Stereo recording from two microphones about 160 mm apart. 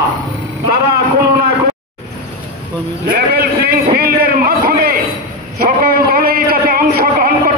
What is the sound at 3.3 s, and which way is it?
A man's voice, 70° right (ahead or behind).